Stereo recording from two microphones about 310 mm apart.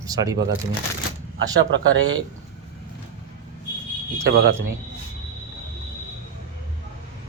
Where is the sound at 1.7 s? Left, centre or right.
Right.